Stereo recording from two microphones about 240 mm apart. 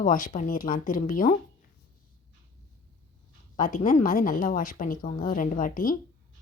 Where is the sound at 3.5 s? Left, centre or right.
Left.